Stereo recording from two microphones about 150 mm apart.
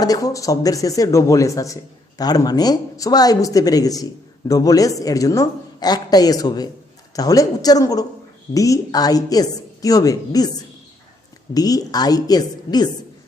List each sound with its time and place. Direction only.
0.0 s speech: 25° left (ahead or behind)
11.5 s speech: 25° left (ahead or behind)